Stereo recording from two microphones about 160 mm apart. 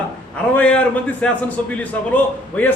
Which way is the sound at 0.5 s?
10° left (ahead or behind).